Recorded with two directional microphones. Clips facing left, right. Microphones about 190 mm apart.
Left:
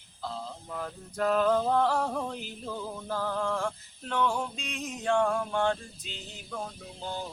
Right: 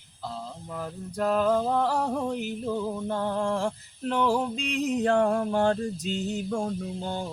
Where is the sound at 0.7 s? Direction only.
10° right (ahead or behind).